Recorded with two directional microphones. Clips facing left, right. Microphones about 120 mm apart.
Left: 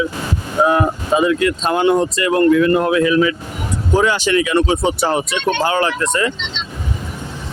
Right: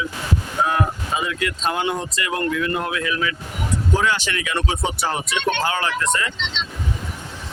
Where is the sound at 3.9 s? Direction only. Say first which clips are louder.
Left 9 dB; 15° left (ahead or behind).